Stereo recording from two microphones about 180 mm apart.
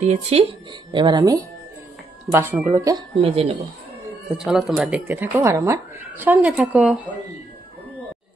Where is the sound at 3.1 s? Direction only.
35° right (ahead or behind).